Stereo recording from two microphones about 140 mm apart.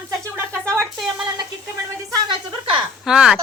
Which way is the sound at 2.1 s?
35° right (ahead or behind).